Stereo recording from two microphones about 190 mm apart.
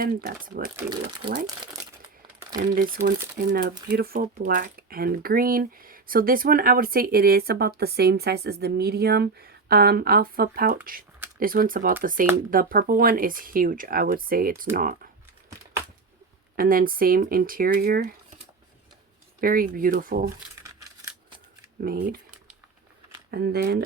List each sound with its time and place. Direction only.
0.0 s speech: 50° right (ahead or behind)
0.8 s speech: 20° right (ahead or behind)
2.6 s speech: 50° right (ahead or behind)
16.6 s speech: 50° right (ahead or behind)
19.4 s speech: 50° right (ahead or behind)
21.8 s speech: 50° right (ahead or behind)
23.3 s speech: 55° right (ahead or behind)